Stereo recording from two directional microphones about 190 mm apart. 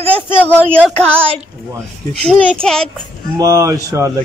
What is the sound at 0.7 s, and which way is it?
Music, 10° left (ahead or behind).